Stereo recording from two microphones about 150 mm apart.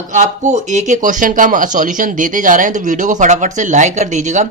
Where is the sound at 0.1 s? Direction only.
55° right (ahead or behind).